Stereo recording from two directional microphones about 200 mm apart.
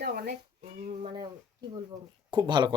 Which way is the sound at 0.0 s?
55° right (ahead or behind).